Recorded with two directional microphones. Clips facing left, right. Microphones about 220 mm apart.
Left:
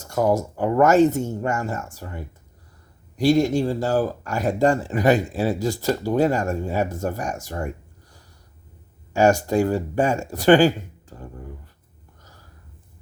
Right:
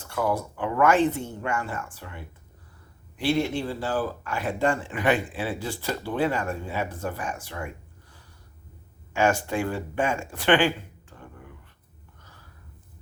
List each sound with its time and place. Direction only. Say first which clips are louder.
0.0 s speech: left 6 dB; 40° left (ahead or behind)
9.1 s speech: left 6 dB; 40° left (ahead or behind)
12.2 s snort: left 3 dB; 40° left (ahead or behind)